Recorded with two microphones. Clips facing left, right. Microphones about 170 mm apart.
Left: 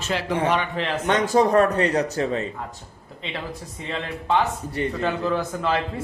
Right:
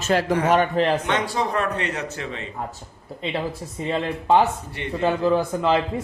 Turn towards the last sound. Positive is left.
turn(degrees=-30)  # may be behind; listen again after turning